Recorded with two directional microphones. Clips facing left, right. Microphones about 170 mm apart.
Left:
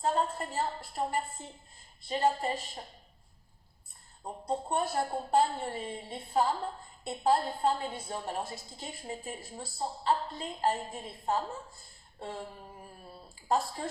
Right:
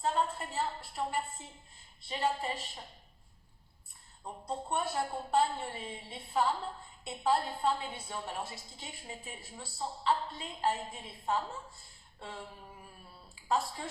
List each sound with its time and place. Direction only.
0.0 s a woman's voice: 40° left (ahead or behind)
4.2 s a woman's voice: 40° left (ahead or behind)